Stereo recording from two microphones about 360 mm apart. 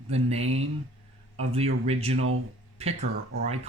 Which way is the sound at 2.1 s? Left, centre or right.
Right.